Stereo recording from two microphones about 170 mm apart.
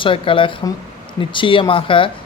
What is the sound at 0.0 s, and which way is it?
Speech, 30° left (ahead or behind).